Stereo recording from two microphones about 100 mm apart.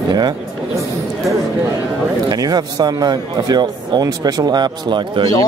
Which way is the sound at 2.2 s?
40° right (ahead or behind).